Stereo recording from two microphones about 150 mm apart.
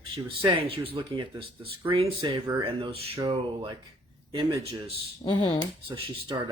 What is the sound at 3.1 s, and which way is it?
Speech, 30° right (ahead or behind).